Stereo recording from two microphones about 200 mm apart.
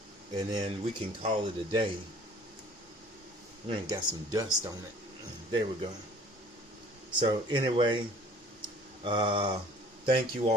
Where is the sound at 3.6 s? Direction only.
20° right (ahead or behind).